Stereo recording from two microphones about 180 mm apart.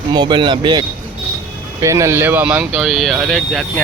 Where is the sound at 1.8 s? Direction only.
15° right (ahead or behind).